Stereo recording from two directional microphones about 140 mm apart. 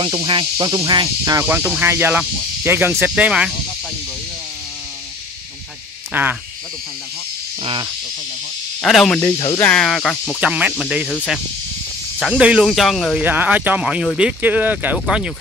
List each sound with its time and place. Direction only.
0.0 s speech: 35° right (ahead or behind)
1.4 s speech: 15° right (ahead or behind)
6.1 s speech: 15° right (ahead or behind)
7.6 s speech: 35° right (ahead or behind)
8.8 s speech: centre (ahead or behind)
10.4 s speech: 5° right (ahead or behind)
12.2 s speech: 5° right (ahead or behind)
13.2 s speech: 15° right (ahead or behind)